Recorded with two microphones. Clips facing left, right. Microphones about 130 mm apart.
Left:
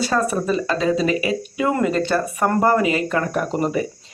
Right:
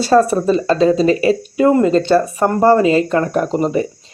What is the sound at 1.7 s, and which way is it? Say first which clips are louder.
Speech: right 6 dB; 25° right (ahead or behind).